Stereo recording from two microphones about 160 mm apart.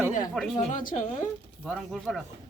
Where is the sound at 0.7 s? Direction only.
55° left (ahead or behind).